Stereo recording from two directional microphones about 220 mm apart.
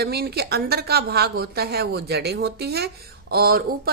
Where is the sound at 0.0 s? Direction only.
45° right (ahead or behind).